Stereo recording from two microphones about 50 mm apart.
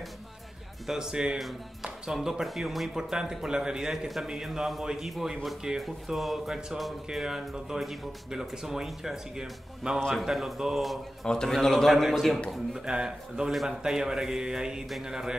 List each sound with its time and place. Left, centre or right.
0.8 s speech: centre
1.4 s speech: centre
11.2 s speech: centre
12.8 s speech: centre